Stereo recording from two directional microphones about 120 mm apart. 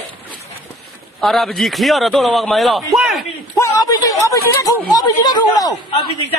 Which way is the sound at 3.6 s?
25° left (ahead or behind).